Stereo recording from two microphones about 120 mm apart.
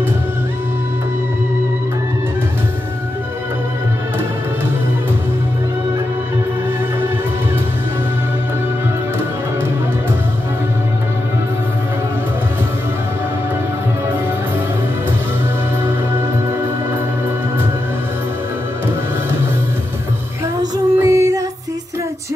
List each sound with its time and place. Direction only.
20.7 s female singing: 30° right (ahead or behind)